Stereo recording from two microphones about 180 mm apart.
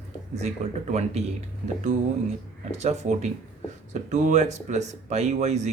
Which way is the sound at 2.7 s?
40° right (ahead or behind).